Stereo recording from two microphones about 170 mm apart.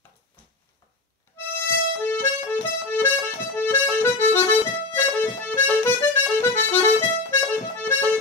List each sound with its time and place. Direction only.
2.0 s accordion: 15° left (ahead or behind)